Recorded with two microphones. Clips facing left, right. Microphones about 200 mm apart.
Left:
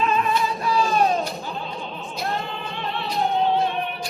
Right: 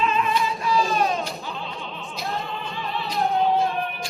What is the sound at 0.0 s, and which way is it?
Music, 40° left (ahead or behind).